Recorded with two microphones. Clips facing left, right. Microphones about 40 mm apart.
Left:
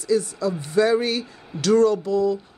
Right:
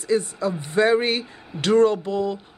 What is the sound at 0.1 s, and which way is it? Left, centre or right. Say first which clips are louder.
Speech: even; right.